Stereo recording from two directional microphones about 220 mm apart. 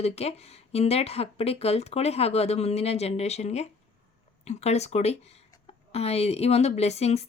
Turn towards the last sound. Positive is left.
turn(degrees=30)  # may be behind; listen again after turning